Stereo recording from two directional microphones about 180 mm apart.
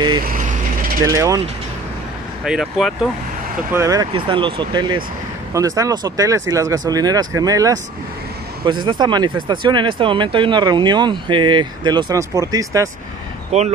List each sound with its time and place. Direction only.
0.2 s speech: 50° right (ahead or behind)
1.0 s speech: 20° right (ahead or behind)
2.4 s speech: centre (ahead or behind)
3.7 s speech: 20° right (ahead or behind)
13.5 s speech: 35° right (ahead or behind)